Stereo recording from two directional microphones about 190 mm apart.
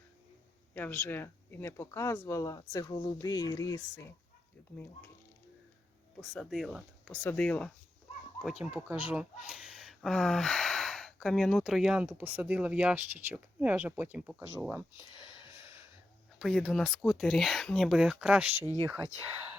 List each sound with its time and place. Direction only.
0.7 s speech: 10° left (ahead or behind)
6.1 s speech: centre (ahead or behind)
8.7 s speech: 10° right (ahead or behind)
14.8 s a sound: 15° right (ahead or behind)
16.4 s speech: centre (ahead or behind)